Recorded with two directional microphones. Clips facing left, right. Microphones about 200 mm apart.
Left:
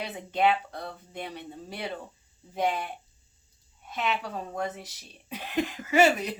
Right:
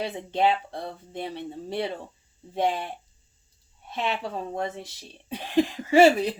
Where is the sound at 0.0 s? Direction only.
30° right (ahead or behind).